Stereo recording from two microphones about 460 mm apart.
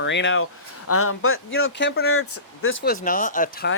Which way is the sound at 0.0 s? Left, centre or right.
Left.